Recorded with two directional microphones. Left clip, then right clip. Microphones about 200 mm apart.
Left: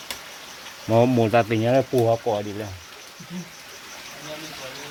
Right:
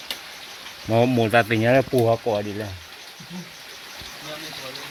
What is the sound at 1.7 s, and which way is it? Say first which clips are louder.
Speech: right 1 dB; 25° right (ahead or behind).